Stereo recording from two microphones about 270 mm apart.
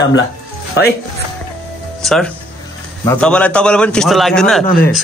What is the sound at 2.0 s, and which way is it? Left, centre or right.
A man's voice, centre.